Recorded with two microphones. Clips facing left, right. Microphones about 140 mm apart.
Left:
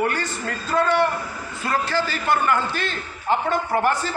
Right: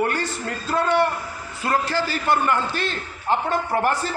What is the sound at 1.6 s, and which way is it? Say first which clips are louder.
Speech: right 1 dB; 35° right (ahead or behind).